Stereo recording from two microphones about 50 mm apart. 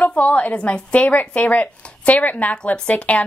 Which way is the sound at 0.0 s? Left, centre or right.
Left.